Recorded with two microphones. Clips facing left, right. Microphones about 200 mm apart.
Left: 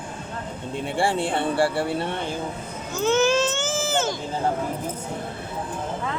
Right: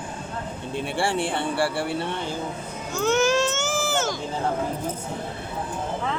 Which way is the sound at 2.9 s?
20° left (ahead or behind).